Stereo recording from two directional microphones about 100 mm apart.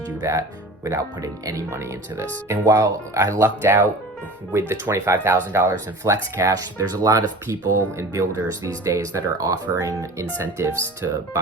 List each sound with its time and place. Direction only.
0.2 s speech: 30° right (ahead or behind)